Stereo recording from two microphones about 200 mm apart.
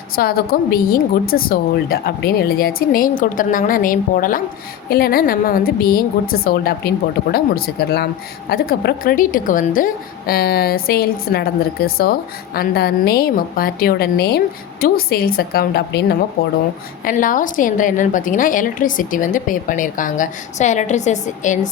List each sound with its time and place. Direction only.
0.2 s a woman's voice: 50° left (ahead or behind)
17.0 s a woman's voice: 45° left (ahead or behind)